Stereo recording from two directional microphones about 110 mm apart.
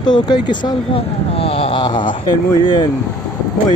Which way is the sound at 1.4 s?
60° left (ahead or behind).